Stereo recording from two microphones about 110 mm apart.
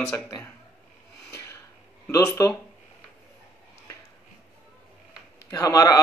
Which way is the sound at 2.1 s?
30° left (ahead or behind).